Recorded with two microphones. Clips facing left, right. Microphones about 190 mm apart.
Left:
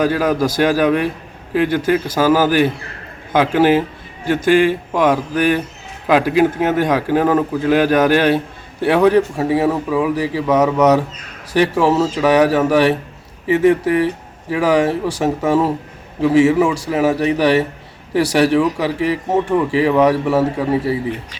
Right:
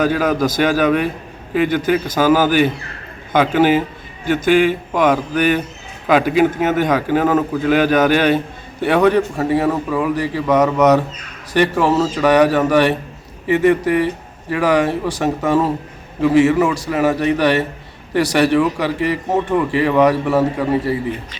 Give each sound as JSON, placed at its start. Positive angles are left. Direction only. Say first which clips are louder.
{"t": 0.0, "sound": "a man's voice", "louder": "even", "side_deg": 10}
{"t": 4.9, "sound": "a man's voice", "louder": "even", "side_deg": 5}